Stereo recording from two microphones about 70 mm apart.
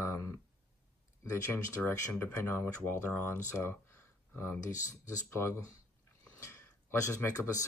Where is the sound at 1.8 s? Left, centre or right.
Left.